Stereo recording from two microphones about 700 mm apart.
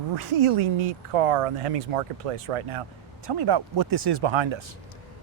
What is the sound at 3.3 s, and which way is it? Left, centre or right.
Speech, right.